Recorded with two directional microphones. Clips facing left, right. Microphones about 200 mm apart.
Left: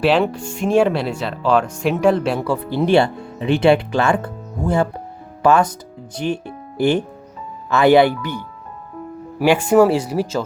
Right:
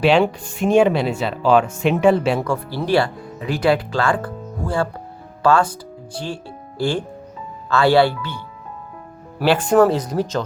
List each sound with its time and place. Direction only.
0.0 s speech: centre (ahead or behind)
2.5 s speech: 20° left (ahead or behind)
9.4 s speech: 10° left (ahead or behind)